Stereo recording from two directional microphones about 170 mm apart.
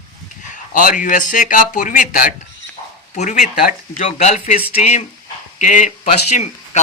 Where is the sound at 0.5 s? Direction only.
50° left (ahead or behind).